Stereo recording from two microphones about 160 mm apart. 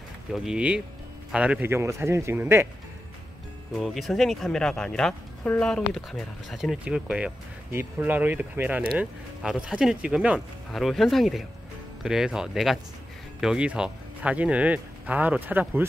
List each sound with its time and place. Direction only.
0.3 s speech: 5° right (ahead or behind)
3.7 s speech: centre (ahead or behind)